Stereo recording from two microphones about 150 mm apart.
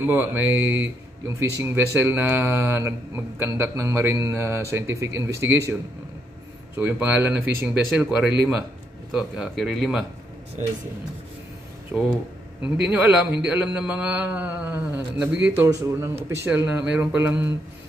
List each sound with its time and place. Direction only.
0.0 s speech: 10° right (ahead or behind)
6.8 s speech: 15° right (ahead or behind)
11.9 s speech: centre (ahead or behind)